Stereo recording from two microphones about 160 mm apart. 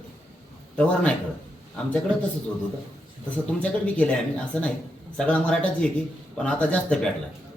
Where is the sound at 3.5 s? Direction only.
10° left (ahead or behind).